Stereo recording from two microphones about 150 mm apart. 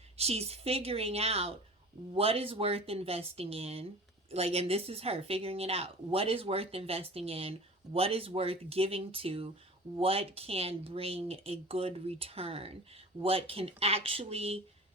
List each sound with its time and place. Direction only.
0.2 s a woman's voice: 45° right (ahead or behind)